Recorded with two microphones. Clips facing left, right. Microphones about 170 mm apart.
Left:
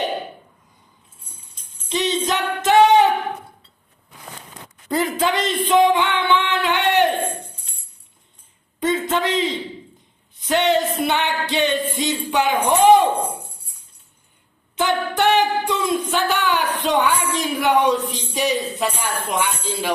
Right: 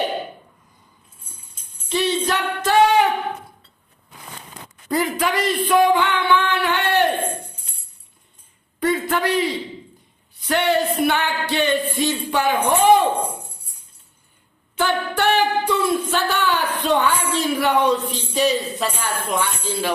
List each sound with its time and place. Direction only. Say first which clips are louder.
1.9 s a sound: right 1 dB; 20° left (ahead or behind)
4.9 s speech: left 1 dB; 25° left (ahead or behind)
8.8 s a sound: even; 20° left (ahead or behind)
10.4 s speech: left 1 dB; 20° left (ahead or behind)
14.8 s singing: left 1 dB; 15° left (ahead or behind)
17.3 s speech: even; 15° left (ahead or behind)